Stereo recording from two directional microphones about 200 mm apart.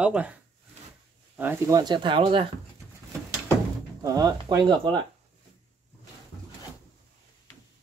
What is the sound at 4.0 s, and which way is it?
Speech, 20° right (ahead or behind).